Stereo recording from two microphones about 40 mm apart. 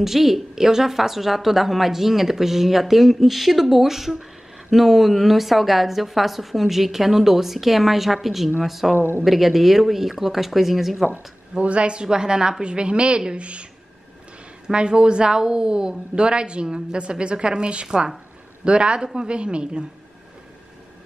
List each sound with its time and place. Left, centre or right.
0.0 s a woman's voice: centre
11.5 s a woman's voice: right
14.7 s a woman's voice: right